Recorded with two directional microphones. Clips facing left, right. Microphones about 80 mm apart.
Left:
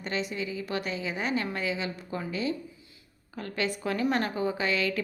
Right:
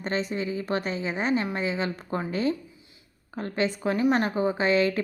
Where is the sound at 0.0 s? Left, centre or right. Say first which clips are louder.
Right 4 dB; right.